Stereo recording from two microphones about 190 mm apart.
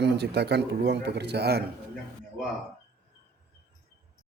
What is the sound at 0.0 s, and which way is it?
Speech, 60° right (ahead or behind).